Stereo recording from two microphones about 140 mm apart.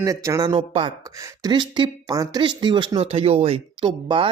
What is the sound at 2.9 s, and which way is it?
Speech, 45° right (ahead or behind).